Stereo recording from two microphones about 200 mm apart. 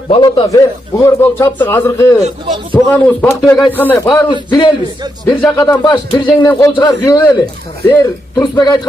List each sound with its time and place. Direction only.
0.1 s a man's voice: 20° left (ahead or behind)
2.2 s speech: 35° right (ahead or behind)
2.7 s a man's voice: 10° left (ahead or behind)
7.8 s a man's voice: 10° left (ahead or behind)
8.4 s a man's voice: 20° left (ahead or behind)